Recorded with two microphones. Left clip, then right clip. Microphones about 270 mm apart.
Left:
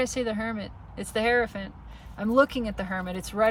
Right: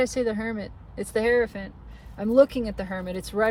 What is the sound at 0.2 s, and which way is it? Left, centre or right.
Speech, centre.